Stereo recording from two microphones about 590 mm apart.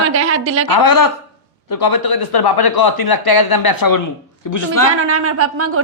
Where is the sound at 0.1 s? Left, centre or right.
Right.